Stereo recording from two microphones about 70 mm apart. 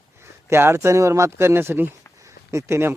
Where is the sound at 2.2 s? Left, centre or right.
Right.